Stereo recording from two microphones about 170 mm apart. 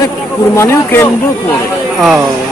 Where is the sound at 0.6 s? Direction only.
15° left (ahead or behind).